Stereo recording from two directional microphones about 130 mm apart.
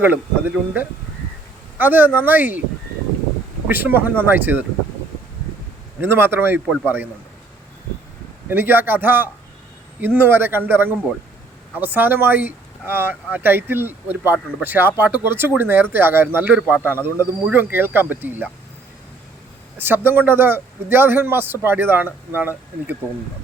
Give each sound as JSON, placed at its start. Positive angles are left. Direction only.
{"t": 0.0, "sound": "speech", "side_deg": -10}
{"t": 3.7, "sound": "speech", "side_deg": -15}
{"t": 6.0, "sound": "speech", "side_deg": -15}
{"t": 8.4, "sound": "speech", "side_deg": -15}
{"t": 19.7, "sound": "speech", "side_deg": -15}